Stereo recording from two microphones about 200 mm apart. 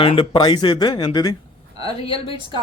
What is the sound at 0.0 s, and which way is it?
A woman's voice, 25° left (ahead or behind).